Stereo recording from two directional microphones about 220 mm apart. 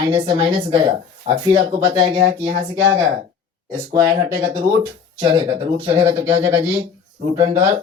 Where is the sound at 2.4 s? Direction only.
15° right (ahead or behind).